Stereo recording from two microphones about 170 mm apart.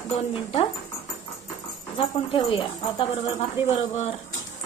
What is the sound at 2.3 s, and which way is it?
Speech, 30° left (ahead or behind).